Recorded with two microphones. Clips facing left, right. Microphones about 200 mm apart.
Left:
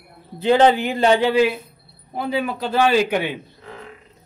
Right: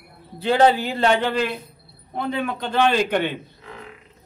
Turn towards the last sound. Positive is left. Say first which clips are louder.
# left 2 dB
turn(degrees=5)  # may be behind; listen again after turning